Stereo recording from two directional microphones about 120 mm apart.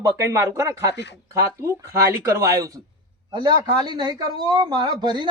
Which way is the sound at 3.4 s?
40° right (ahead or behind).